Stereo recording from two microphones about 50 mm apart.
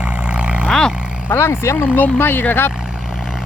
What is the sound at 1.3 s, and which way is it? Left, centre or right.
Speech, left.